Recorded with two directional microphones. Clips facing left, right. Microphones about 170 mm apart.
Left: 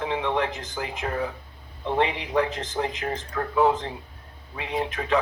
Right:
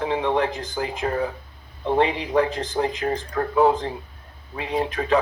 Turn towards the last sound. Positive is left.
turn(degrees=-35)  # may be behind; listen again after turning